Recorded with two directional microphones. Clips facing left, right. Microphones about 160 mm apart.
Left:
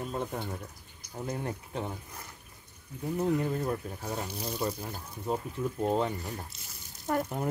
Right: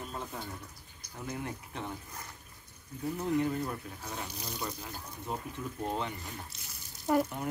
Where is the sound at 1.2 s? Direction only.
35° left (ahead or behind).